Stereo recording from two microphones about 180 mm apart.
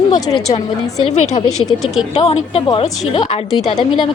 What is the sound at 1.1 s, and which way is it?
Speech, 40° left (ahead or behind).